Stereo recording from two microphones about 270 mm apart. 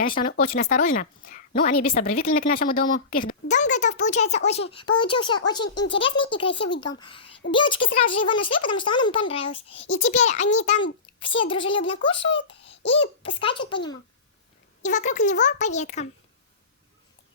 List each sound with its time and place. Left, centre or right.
0.0 s a woman's voice: left
14.8 s a child's voice: left